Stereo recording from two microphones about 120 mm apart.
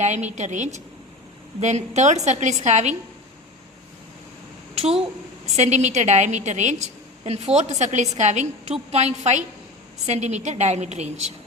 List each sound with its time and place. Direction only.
0.0 s a woman's voice: 75° right (ahead or behind)
4.7 s a sound: 55° right (ahead or behind)
5.5 s a woman's voice: 75° right (ahead or behind)
7.3 s a woman's voice: 65° right (ahead or behind)